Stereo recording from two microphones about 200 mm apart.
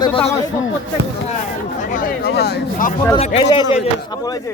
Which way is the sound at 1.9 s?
45° left (ahead or behind).